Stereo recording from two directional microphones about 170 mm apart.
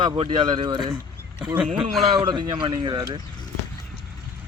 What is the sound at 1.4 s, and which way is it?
Speech, 5° right (ahead or behind).